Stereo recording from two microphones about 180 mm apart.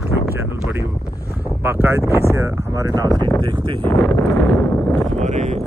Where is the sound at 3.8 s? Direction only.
15° left (ahead or behind).